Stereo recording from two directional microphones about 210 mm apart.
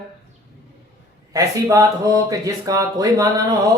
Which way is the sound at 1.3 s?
15° right (ahead or behind).